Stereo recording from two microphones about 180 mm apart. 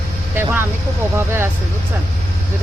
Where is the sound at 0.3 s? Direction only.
10° right (ahead or behind).